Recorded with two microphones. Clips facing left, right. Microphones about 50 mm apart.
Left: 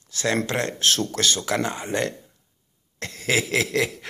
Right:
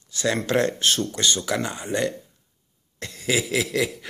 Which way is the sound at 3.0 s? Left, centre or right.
Left.